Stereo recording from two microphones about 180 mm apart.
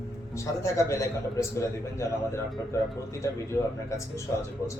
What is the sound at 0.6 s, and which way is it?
A man's voice, 15° left (ahead or behind).